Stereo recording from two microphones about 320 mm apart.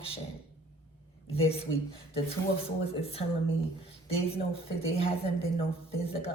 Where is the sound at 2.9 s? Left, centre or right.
Centre.